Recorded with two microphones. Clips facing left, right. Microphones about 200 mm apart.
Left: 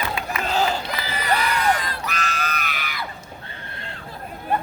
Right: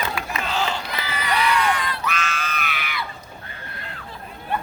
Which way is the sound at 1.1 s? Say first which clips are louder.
Right 2 dB; 40° left (ahead or behind).